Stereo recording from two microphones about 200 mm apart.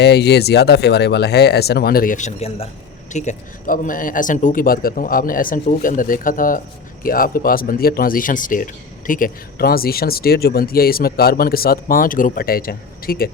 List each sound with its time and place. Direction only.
0.0 s speech: 55° left (ahead or behind)